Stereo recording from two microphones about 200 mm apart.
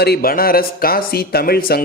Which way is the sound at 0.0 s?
50° left (ahead or behind).